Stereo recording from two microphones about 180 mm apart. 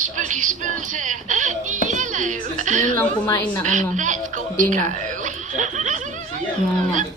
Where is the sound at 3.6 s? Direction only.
45° right (ahead or behind).